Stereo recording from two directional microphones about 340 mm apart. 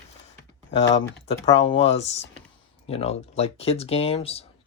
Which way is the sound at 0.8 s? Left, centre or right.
Centre.